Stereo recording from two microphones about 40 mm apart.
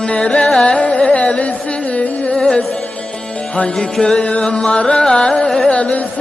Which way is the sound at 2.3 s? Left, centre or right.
Left.